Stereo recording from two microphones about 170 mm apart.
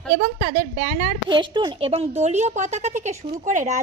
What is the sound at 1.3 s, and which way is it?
A woman's voice, 25° right (ahead or behind).